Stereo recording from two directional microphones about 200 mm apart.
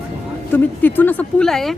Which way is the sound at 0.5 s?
10° left (ahead or behind).